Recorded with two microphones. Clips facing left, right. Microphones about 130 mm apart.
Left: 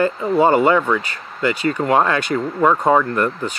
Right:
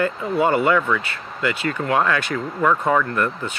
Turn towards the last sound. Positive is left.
turn(degrees=25)  # may be behind; listen again after turning